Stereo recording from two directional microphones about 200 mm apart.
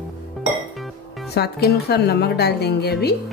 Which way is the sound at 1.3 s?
55° left (ahead or behind).